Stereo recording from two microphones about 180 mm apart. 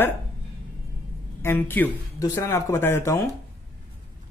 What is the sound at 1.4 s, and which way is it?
Speech, 10° left (ahead or behind).